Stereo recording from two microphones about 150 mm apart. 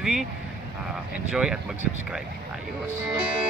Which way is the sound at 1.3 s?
5° right (ahead or behind).